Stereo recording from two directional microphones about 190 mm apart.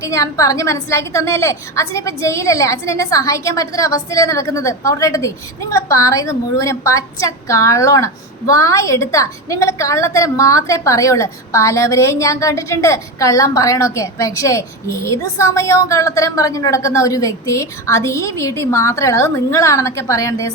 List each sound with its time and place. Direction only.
0.0 s a woman's voice: 15° left (ahead or behind)